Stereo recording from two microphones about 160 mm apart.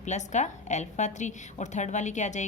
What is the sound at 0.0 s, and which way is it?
A woman's voice, 50° left (ahead or behind).